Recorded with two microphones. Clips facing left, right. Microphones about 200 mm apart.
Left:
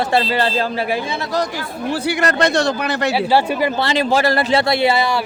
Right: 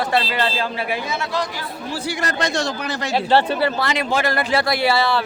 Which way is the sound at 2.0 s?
70° left (ahead or behind).